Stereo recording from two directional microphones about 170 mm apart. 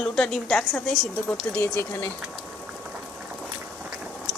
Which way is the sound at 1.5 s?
15° left (ahead or behind).